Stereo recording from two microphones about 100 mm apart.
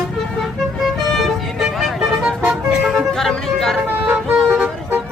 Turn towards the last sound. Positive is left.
turn(degrees=-20)  # may be behind; listen again after turning